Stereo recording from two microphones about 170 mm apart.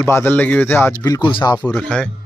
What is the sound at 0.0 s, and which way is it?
Speech, 10° left (ahead or behind).